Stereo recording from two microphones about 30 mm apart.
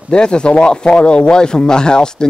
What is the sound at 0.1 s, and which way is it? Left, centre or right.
A man's voice, left.